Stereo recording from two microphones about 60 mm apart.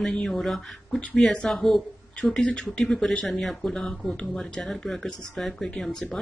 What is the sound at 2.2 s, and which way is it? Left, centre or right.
Speech, centre.